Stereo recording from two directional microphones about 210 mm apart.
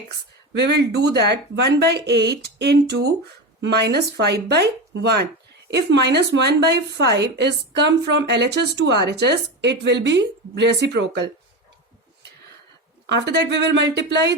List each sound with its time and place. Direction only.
0.5 s speech: 55° right (ahead or behind)
13.1 s speech: 55° right (ahead or behind)